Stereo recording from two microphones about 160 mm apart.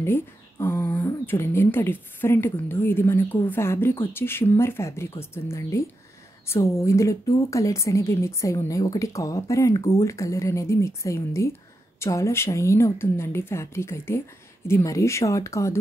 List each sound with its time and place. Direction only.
0.0 s a woman's voice: 15° left (ahead or behind)